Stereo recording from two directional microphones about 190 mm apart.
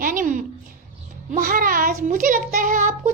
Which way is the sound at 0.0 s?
45° right (ahead or behind).